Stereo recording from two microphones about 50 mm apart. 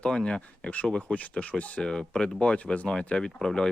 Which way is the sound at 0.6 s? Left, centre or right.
Left.